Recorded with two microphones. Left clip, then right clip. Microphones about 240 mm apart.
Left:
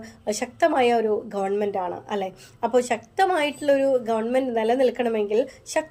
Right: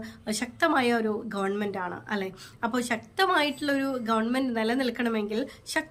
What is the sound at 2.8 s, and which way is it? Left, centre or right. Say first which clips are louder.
A woman's voice: left 6 dB; centre.